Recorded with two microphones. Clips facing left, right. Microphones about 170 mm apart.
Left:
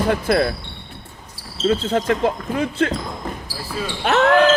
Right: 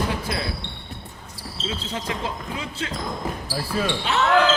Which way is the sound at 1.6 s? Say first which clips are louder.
Left 12 dB; 55° left (ahead or behind).